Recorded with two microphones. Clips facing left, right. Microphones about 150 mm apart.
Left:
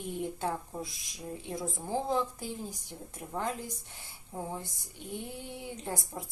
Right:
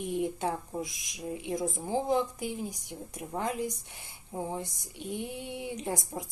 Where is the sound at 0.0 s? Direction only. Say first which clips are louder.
Right 4 dB; 20° right (ahead or behind).